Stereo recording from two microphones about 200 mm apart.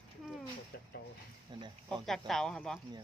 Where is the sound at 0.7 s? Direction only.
50° left (ahead or behind).